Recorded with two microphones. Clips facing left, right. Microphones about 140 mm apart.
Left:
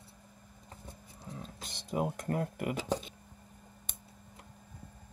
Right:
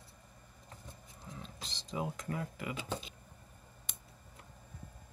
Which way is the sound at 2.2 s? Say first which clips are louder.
Left 6 dB; 55° left (ahead or behind).